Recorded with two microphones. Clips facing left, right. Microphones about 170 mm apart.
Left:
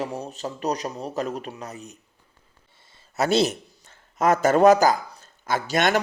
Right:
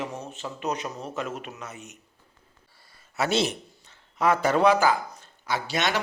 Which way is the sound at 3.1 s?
40° left (ahead or behind).